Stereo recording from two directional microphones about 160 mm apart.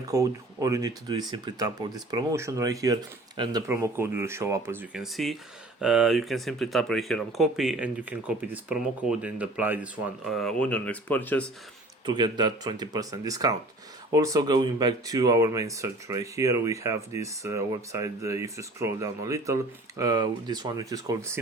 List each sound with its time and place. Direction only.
0.0 s speech: 20° right (ahead or behind)
5.1 s speech: centre (ahead or behind)
12.0 s speech: 25° right (ahead or behind)